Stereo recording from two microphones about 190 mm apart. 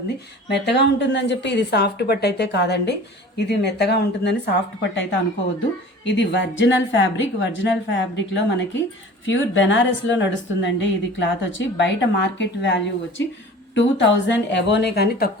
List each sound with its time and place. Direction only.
0.5 s a woman's voice: 65° left (ahead or behind)
9.2 s a woman's voice: 80° left; by 15.3 s 55° left (ahead or behind)